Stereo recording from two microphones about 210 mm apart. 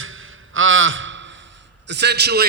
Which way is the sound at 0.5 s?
70° right (ahead or behind).